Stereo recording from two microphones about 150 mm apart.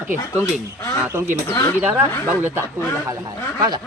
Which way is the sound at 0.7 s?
20° left (ahead or behind).